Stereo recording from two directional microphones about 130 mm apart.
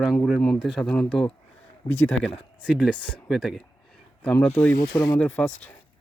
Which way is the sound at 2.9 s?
10° left (ahead or behind).